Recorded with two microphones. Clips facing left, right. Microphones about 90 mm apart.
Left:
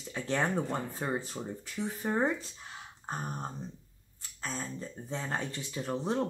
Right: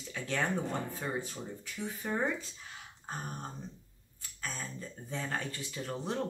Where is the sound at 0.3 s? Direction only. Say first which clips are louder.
Left 3 dB; 35° left (ahead or behind).